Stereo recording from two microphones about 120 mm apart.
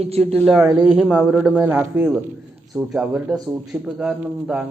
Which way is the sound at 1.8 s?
15° right (ahead or behind).